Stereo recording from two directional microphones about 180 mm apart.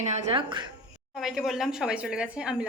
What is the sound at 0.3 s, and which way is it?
Speech, 25° right (ahead or behind).